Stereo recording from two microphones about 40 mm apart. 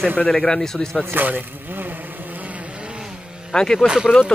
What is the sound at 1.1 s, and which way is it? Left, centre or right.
Speech, right.